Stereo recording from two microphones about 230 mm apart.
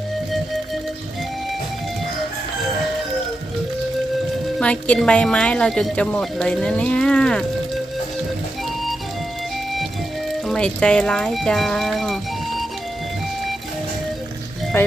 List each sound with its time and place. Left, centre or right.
4.6 s speech: centre
10.4 s speech: centre
14.7 s speech: centre